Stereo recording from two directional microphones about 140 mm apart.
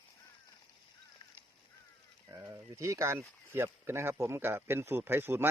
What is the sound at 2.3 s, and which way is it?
Speech, 20° right (ahead or behind).